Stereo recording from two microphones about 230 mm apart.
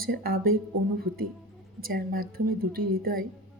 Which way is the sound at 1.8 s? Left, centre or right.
Right.